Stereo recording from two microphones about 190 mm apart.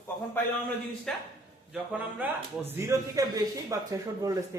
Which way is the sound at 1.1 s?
5° left (ahead or behind).